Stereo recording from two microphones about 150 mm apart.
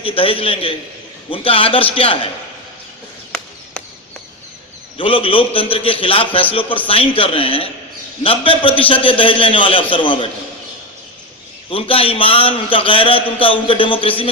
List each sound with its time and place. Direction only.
0.0 s a man's voice: 35° left (ahead or behind)
4.9 s a man's voice: 35° left (ahead or behind)
11.7 s a man's voice: 40° left (ahead or behind)